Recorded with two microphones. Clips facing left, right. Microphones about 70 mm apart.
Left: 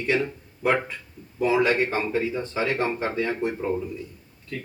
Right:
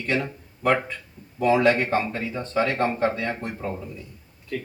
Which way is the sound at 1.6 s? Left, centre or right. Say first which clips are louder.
Right 2 dB; right.